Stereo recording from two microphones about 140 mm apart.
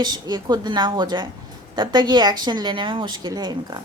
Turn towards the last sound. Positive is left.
turn(degrees=-30)  # may be behind; listen again after turning